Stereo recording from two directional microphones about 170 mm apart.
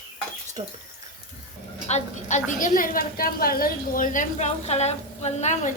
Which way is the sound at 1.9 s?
45° left (ahead or behind).